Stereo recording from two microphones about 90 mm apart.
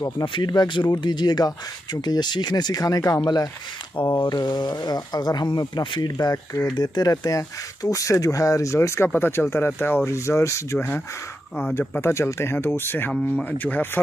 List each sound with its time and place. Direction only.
0.2 s speech: 65° left (ahead or behind); by 3.2 s 40° left (ahead or behind)
3.9 s speech: 50° left (ahead or behind)
6.1 s speech: 40° left (ahead or behind)
12.0 s speech: 30° left (ahead or behind)